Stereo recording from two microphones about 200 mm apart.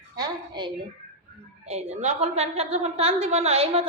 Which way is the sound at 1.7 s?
35° right (ahead or behind).